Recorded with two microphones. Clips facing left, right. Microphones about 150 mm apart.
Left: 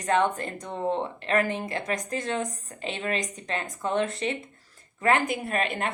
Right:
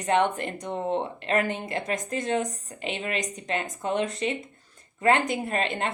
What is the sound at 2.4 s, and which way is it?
A woman's voice, 20° right (ahead or behind).